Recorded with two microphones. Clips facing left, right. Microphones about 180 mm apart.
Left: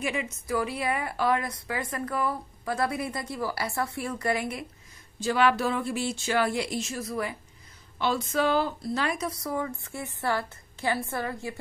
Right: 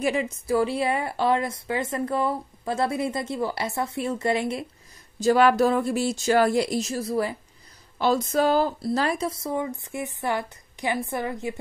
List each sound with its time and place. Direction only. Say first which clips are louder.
0.0 s a woman's voice: right 6 dB; 35° right (ahead or behind)
5.2 s a woman's voice: right 6 dB; 40° right (ahead or behind); by 11.5 s 20° right (ahead or behind)